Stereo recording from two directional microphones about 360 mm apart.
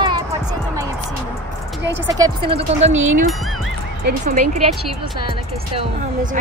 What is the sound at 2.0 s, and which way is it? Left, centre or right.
Speech, centre.